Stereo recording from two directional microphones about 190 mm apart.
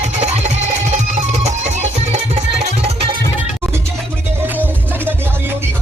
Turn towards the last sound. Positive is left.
turn(degrees=-10)  # may be behind; listen again after turning